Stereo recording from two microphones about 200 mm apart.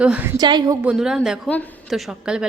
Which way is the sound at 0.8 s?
5° right (ahead or behind).